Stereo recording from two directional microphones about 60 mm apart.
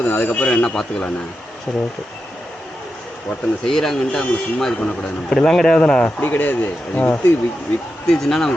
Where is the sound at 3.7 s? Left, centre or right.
Centre.